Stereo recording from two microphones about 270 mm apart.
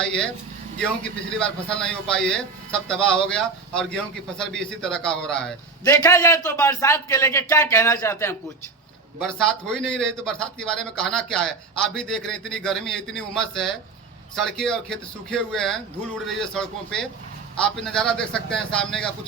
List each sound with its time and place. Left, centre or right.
0.0 s speech: centre